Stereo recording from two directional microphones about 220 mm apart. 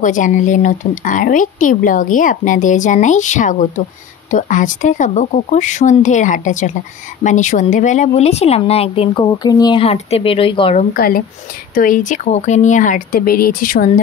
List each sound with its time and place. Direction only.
0.0 s speech: 35° left (ahead or behind)
10.9 s speech: 40° left (ahead or behind)